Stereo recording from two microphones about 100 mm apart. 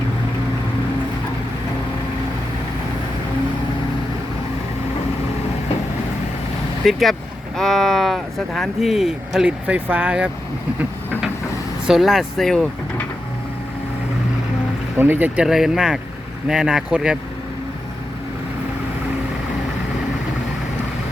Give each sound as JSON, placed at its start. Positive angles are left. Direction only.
{"t": 6.8, "sound": "speech", "side_deg": 0}
{"t": 9.5, "sound": "speech", "side_deg": -15}
{"t": 11.9, "sound": "speech", "side_deg": 0}
{"t": 14.9, "sound": "speech", "side_deg": -20}
{"t": 15.4, "sound": "speech", "side_deg": -5}